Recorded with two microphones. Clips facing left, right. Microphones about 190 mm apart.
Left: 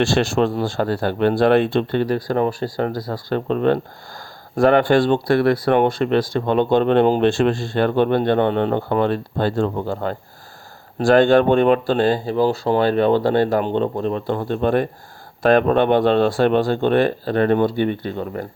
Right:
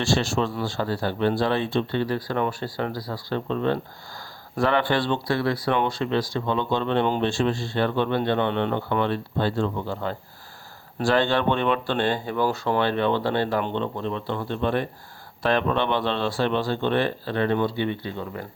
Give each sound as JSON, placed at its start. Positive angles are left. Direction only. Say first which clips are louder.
{"t": 0.0, "sound": "speech", "louder": "left 6 dB", "side_deg": 55}
{"t": 4.5, "sound": "speech", "louder": "left 8 dB", "side_deg": 45}